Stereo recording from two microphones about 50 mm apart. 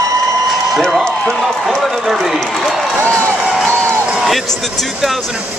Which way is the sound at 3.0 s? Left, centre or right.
Right.